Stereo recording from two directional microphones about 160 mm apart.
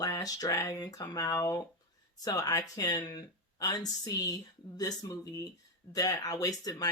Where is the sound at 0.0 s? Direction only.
25° left (ahead or behind).